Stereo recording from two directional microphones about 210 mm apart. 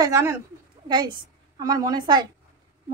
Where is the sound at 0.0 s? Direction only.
15° right (ahead or behind).